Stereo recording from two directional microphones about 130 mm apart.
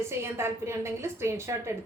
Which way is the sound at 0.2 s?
20° right (ahead or behind).